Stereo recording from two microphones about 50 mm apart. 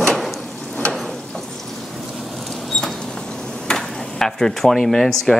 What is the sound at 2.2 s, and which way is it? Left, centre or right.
Mouse, centre.